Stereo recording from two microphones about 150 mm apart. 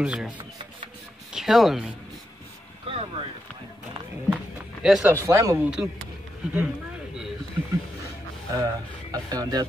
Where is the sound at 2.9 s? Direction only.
40° right (ahead or behind).